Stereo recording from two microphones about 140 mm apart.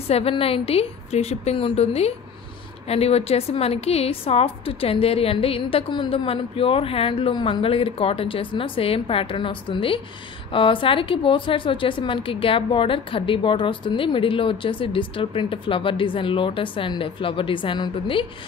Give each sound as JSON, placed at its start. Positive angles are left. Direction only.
{"t": 0.1, "sound": "a woman's voice", "side_deg": 45}